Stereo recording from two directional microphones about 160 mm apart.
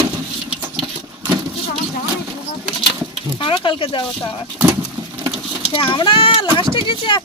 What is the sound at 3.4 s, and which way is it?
Speech, 35° left (ahead or behind).